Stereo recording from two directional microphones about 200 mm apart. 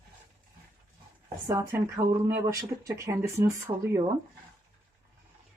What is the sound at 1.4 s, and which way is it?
Speech, 15° right (ahead or behind).